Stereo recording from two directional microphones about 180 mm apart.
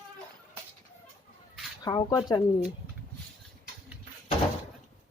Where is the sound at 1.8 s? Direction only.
20° left (ahead or behind).